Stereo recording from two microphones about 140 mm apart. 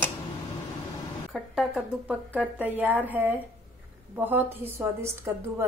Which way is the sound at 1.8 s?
10° right (ahead or behind).